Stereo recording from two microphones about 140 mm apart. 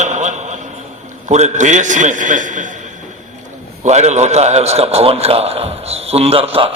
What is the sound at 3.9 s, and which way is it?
A man's voice, 55° right (ahead or behind).